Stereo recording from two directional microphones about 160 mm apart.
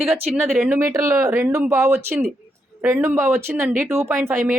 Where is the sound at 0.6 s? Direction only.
15° right (ahead or behind).